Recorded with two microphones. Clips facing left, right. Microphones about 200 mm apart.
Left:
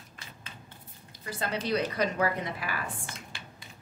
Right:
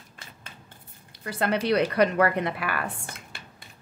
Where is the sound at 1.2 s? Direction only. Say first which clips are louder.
Right 7 dB; 65° right (ahead or behind).